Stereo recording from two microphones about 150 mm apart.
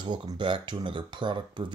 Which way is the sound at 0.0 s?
30° right (ahead or behind).